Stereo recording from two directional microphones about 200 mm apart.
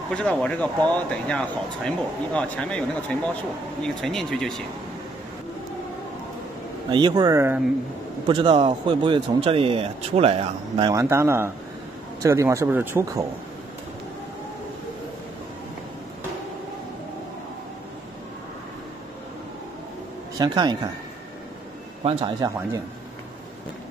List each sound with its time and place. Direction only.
0.1 s speech: 5° left (ahead or behind)
3.8 s speech: centre (ahead or behind)
6.9 s speech: 20° right (ahead or behind)
8.3 s speech: 25° right (ahead or behind)
20.3 s speech: 20° right (ahead or behind)
22.0 s speech: 20° right (ahead or behind)